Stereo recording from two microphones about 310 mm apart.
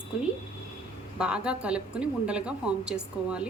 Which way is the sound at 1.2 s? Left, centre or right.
Centre.